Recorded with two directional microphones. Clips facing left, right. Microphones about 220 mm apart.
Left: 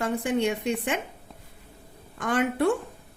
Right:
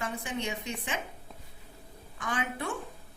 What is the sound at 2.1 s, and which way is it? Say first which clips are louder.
Speech: left 10 dB; 60° left (ahead or behind).